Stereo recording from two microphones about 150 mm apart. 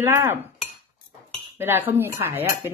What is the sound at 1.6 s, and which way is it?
A woman's voice, 15° right (ahead or behind).